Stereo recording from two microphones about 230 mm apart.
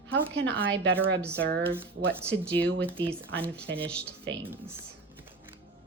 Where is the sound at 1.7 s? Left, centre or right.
Centre.